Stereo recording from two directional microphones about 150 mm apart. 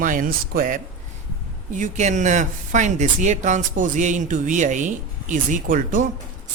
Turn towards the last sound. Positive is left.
turn(degrees=-65)  # may be behind; listen again after turning